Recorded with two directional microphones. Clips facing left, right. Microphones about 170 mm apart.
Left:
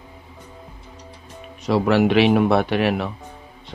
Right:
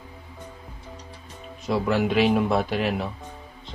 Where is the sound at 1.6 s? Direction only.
80° left.